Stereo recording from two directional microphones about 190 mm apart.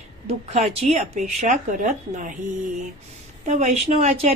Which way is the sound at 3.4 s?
40° right (ahead or behind).